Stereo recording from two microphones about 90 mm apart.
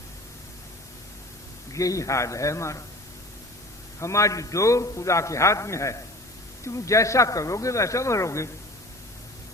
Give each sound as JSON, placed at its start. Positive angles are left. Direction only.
{"t": 1.7, "sound": "a man's voice", "side_deg": 40}
{"t": 4.0, "sound": "a man's voice", "side_deg": 35}